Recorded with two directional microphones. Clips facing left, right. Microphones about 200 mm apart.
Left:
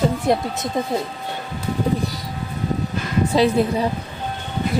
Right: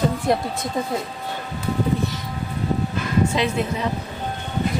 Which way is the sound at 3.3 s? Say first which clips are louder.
Left 6 dB; 35° left (ahead or behind).